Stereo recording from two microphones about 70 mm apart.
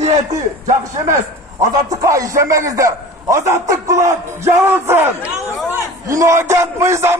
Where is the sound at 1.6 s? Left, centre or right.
Right.